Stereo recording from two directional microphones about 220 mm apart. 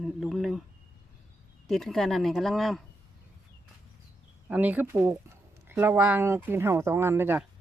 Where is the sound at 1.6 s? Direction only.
Centre (ahead or behind).